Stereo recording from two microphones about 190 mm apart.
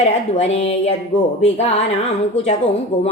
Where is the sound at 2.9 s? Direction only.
40° left (ahead or behind).